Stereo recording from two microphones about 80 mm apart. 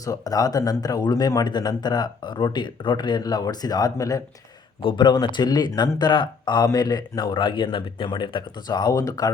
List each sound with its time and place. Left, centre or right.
0.0 s speech: left
4.8 s speech: left
5.1 s speech: left
6.7 s a man's voice: left